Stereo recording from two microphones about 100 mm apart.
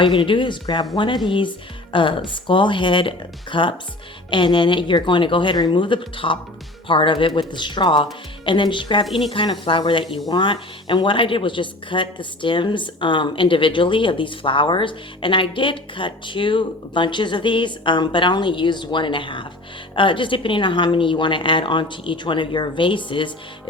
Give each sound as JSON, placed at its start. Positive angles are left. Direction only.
{"t": 0.0, "sound": "speech", "side_deg": 55}